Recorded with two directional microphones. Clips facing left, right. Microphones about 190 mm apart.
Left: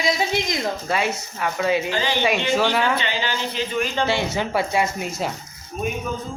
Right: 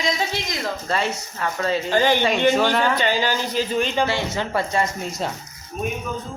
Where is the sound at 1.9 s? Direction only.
50° right (ahead or behind).